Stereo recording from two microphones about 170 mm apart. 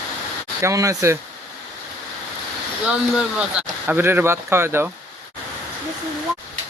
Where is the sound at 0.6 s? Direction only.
20° right (ahead or behind).